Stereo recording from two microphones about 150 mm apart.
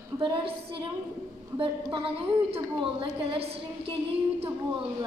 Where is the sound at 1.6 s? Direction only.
35° right (ahead or behind).